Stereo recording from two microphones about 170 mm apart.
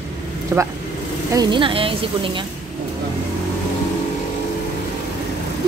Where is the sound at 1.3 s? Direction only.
25° right (ahead or behind).